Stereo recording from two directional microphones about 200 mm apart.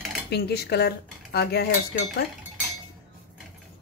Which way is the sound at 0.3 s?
55° left (ahead or behind).